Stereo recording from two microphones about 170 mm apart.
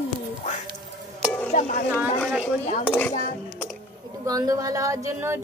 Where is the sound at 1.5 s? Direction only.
45° left (ahead or behind).